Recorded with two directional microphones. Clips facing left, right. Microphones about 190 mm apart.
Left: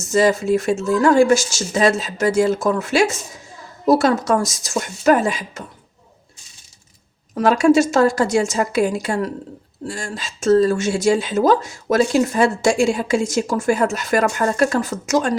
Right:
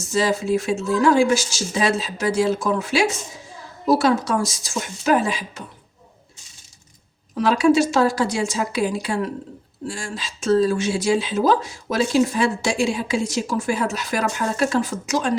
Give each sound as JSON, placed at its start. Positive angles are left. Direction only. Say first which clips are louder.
{"t": 0.1, "sound": "speech", "louder": "left 4 dB", "side_deg": 45}
{"t": 7.3, "sound": "speech", "louder": "left 3 dB", "side_deg": 45}